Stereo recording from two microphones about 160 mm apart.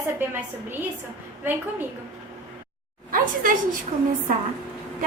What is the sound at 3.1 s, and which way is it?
Speech, 60° right (ahead or behind).